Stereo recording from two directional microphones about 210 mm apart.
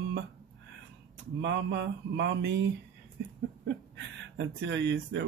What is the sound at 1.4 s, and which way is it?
Speech, 55° right (ahead or behind).